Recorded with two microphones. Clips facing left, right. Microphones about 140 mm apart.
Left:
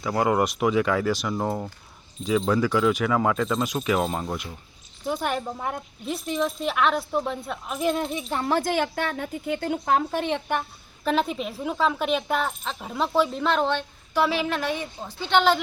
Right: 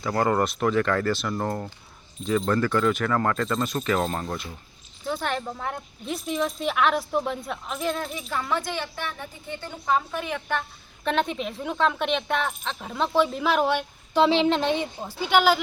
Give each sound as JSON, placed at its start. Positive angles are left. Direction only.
{"t": 0.0, "sound": "speech", "side_deg": 5}
{"t": 7.8, "sound": "speech", "side_deg": 15}
{"t": 8.7, "sound": "a woman's voice", "side_deg": 55}
{"t": 9.0, "sound": "speech", "side_deg": 75}
{"t": 9.6, "sound": "a woman's voice", "side_deg": 65}
{"t": 10.1, "sound": "speech", "side_deg": 30}
{"t": 11.0, "sound": "speech", "side_deg": 5}
{"t": 15.3, "sound": "a woman's voice", "side_deg": -5}